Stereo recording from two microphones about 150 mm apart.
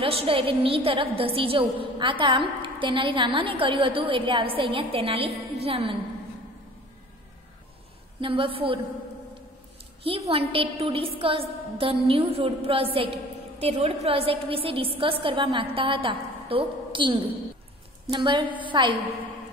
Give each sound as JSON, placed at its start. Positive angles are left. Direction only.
{"t": 0.0, "sound": "a woman's voice", "side_deg": -40}
{"t": 8.2, "sound": "a woman's voice", "side_deg": -35}
{"t": 10.0, "sound": "a woman's voice", "side_deg": -40}